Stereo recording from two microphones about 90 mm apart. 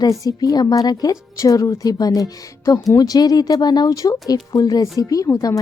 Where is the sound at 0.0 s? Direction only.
45° left (ahead or behind).